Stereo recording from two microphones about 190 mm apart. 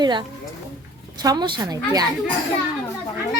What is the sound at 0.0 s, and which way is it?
A child's voice, 25° right (ahead or behind).